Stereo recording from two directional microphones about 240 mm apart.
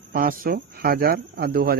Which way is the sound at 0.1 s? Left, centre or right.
Right.